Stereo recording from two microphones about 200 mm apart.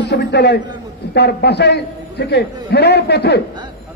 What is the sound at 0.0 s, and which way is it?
A man's voice, 55° left (ahead or behind).